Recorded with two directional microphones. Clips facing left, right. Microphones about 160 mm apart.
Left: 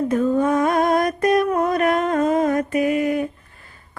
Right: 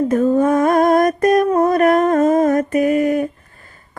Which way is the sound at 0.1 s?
45° right (ahead or behind).